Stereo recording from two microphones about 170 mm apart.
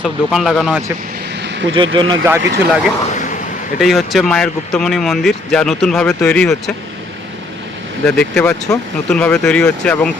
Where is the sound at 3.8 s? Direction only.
Centre (ahead or behind).